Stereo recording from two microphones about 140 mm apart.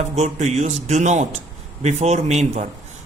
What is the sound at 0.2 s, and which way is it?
A man's voice, 50° right (ahead or behind).